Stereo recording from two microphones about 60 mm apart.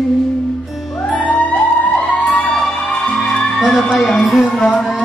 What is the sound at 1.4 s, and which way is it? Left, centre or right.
Music, left.